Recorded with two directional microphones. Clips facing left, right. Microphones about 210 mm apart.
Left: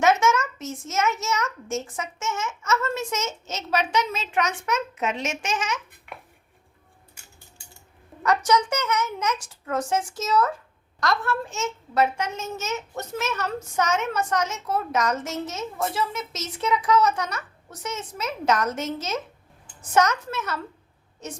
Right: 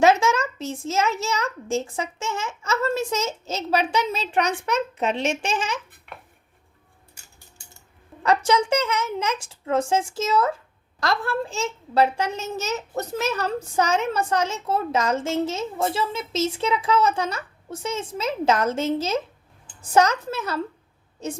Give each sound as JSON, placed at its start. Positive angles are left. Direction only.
{"t": 0.0, "sound": "a child's voice", "side_deg": -30}
{"t": 8.2, "sound": "a child's voice", "side_deg": -30}